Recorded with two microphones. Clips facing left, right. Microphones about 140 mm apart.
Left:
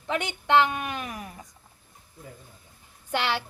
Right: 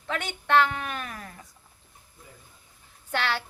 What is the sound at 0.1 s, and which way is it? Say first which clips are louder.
A woman's voice: left 1 dB; 15° left (ahead or behind).